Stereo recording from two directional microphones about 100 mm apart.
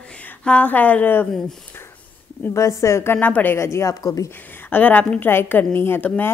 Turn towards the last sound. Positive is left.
turn(degrees=20)  # may be behind; listen again after turning